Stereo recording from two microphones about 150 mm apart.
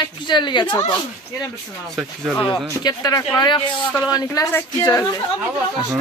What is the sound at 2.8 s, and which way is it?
A woman's voice, 25° left (ahead or behind).